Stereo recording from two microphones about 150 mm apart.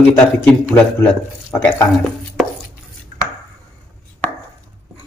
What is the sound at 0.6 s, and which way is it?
A man's voice, 10° left (ahead or behind).